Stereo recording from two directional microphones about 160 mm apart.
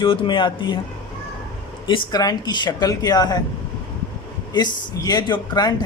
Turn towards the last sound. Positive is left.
turn(degrees=25)  # may be behind; listen again after turning